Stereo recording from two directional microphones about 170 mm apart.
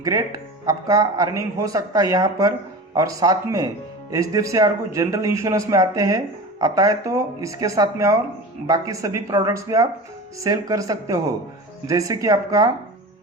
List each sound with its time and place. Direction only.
0.0 s a man's voice: 20° right (ahead or behind)